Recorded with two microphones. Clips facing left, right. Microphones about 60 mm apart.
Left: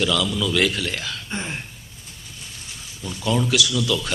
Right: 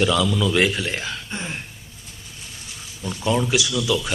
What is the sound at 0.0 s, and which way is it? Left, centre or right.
A man's voice, right.